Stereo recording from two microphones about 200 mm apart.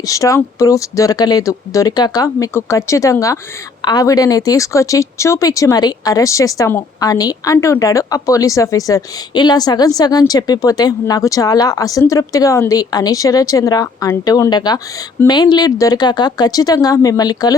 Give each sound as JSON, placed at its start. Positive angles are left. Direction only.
{"t": 0.0, "sound": "a woman's voice", "side_deg": 15}